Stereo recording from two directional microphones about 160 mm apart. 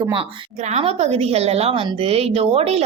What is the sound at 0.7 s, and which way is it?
A woman's voice, 40° right (ahead or behind).